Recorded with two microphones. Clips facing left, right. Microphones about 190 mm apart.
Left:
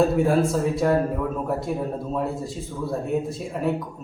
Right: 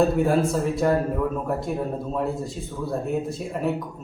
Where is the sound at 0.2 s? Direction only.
Centre (ahead or behind).